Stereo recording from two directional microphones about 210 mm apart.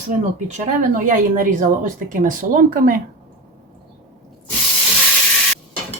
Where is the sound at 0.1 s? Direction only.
35° right (ahead or behind).